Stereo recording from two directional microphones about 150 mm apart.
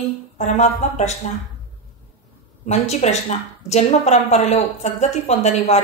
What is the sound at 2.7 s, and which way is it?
A woman's voice, 50° left (ahead or behind).